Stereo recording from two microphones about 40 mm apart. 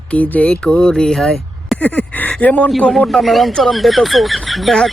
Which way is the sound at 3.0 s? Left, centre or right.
Centre.